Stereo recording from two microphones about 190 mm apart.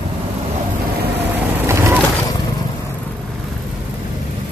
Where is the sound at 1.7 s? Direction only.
15° right (ahead or behind).